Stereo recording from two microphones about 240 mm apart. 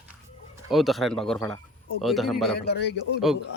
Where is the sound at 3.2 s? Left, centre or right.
Centre.